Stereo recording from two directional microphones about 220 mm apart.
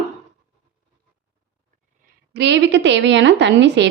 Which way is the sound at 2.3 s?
55° right (ahead or behind).